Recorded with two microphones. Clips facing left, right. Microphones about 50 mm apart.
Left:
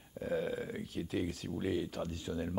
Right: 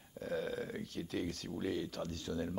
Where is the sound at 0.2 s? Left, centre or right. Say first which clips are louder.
Left 3 dB; centre.